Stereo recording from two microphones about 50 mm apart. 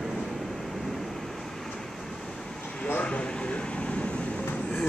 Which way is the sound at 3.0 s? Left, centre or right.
Left.